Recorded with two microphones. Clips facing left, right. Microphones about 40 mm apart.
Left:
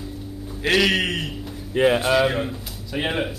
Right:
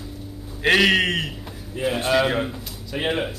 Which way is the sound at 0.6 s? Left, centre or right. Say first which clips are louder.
Right 2 dB; centre.